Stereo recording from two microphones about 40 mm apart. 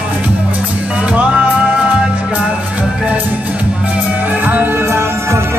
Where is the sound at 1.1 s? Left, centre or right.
Right.